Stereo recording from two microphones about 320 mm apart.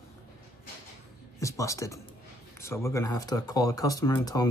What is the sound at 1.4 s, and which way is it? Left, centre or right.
Speech, centre.